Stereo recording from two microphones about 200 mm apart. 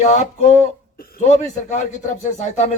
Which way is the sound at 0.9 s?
45° left (ahead or behind).